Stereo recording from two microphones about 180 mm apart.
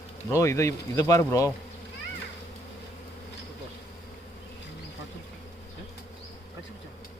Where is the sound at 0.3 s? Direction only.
15° left (ahead or behind).